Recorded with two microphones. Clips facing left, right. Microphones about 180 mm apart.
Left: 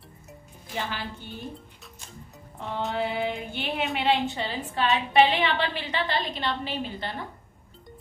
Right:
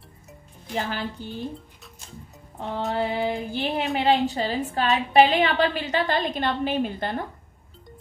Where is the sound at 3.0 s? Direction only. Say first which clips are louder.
Right 2 dB; 35° right (ahead or behind).